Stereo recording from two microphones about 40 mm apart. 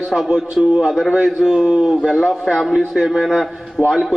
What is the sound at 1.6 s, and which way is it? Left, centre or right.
Speech, right.